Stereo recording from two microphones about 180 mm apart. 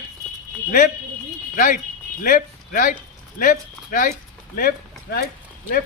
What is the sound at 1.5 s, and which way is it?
Speech, 50° left (ahead or behind).